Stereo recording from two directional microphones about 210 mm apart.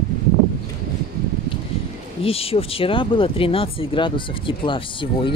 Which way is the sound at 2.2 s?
25° left (ahead or behind).